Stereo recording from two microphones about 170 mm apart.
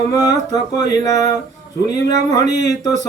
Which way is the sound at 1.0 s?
20° left (ahead or behind).